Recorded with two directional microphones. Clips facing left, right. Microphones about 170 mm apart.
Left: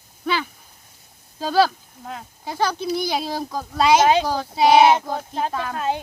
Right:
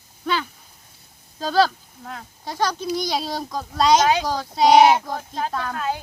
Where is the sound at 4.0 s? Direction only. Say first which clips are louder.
Left 3 dB; 25° left (ahead or behind).